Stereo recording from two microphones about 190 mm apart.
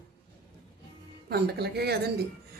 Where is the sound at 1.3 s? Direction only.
55° right (ahead or behind).